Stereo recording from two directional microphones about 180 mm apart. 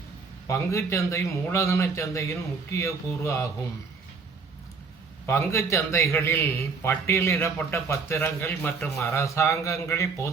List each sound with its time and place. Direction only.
0.4 s a man's voice: 15° left (ahead or behind)
5.2 s a man's voice: 15° left (ahead or behind)